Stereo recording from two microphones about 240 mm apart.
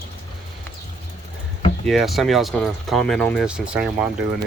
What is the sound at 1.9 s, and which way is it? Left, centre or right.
Speech, centre.